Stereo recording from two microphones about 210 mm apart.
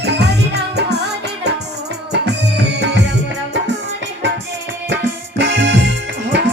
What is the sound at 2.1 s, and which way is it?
Music, 55° right (ahead or behind).